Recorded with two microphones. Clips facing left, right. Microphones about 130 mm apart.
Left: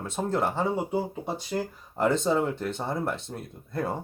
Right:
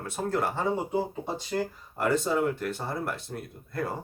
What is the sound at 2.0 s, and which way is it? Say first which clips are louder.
Speech: left 2 dB; 20° left (ahead or behind).